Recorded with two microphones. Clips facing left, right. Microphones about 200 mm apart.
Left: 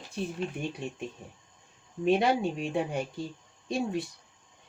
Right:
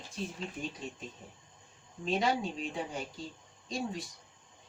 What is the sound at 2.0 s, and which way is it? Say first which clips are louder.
Speech: left 6 dB; 65° left (ahead or behind).